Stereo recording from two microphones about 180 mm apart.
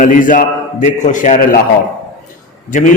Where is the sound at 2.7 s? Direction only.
45° left (ahead or behind).